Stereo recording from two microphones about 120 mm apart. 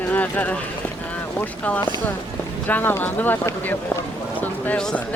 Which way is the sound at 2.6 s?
15° left (ahead or behind).